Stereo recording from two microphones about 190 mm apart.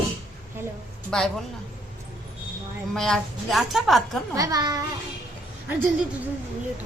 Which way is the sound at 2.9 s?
Centre (ahead or behind).